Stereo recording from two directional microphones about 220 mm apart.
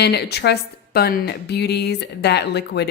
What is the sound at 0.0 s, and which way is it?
Speech, 50° left (ahead or behind).